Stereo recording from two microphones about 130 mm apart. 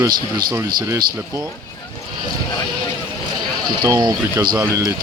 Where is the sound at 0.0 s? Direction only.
25° right (ahead or behind).